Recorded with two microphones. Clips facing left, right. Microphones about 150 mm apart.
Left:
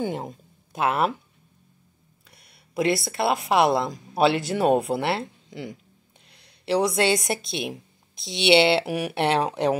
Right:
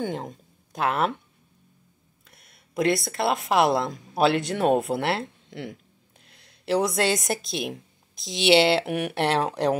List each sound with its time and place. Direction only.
0.0 s speech: 5° left (ahead or behind)
2.3 s a woman's voice: centre (ahead or behind)